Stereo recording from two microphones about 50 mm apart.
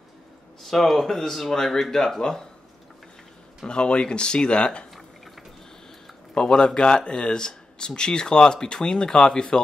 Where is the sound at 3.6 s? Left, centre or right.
Centre.